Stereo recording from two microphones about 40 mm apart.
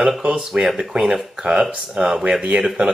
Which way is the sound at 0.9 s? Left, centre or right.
Right.